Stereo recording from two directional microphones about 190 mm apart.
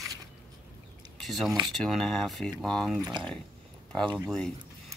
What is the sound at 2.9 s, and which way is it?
Speech, 20° right (ahead or behind).